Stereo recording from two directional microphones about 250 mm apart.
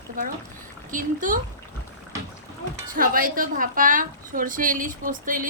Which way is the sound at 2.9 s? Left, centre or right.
Right.